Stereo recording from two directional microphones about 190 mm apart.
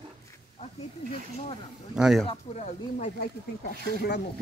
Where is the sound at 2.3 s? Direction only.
35° left (ahead or behind); by 4.1 s 55° left (ahead or behind).